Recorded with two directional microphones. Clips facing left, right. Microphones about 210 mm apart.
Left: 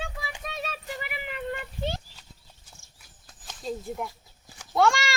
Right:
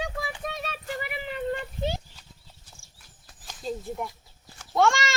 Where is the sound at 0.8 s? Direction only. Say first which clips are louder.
Right 3 dB; 35° right (ahead or behind).